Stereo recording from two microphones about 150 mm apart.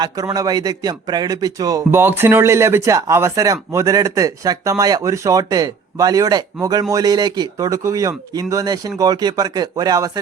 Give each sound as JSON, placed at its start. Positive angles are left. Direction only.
{"t": 0.3, "sound": "speech", "side_deg": -25}